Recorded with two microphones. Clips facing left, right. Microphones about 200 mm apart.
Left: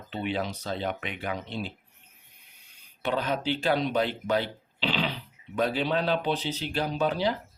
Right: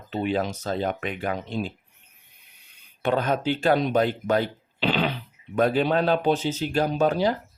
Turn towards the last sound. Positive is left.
turn(degrees=-45)  # may be behind; listen again after turning